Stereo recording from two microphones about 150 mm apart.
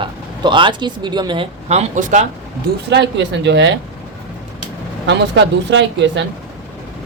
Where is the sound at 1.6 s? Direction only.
50° right (ahead or behind).